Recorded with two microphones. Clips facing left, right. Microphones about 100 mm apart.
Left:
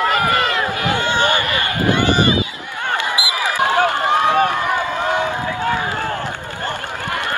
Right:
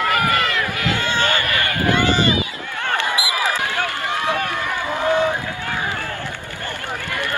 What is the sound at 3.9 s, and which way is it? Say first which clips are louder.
Run: left 7 dB; 20° left (ahead or behind).